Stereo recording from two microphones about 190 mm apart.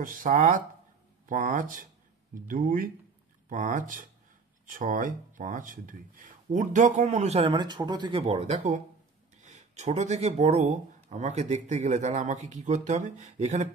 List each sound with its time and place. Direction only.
0.0 s speech: 45° right (ahead or behind)